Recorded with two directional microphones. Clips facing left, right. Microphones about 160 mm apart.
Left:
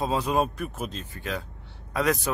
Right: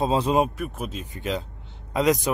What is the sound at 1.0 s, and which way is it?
Speech, 20° right (ahead or behind).